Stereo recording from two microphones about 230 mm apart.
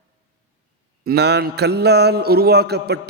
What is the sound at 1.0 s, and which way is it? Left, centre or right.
A man's voice, right.